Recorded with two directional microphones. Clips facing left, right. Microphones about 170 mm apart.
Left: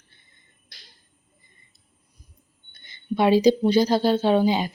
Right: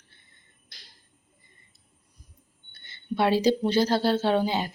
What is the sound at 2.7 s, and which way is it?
Speech, 15° left (ahead or behind).